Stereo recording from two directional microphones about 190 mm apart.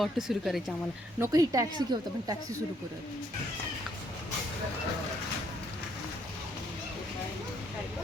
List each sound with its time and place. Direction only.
0.0 s speech: centre (ahead or behind)
1.2 s speech: 20° right (ahead or behind)